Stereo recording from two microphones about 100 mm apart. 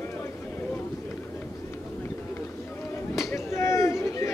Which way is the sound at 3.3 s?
25° left (ahead or behind).